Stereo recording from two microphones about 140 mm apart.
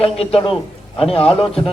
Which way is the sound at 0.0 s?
45° left (ahead or behind).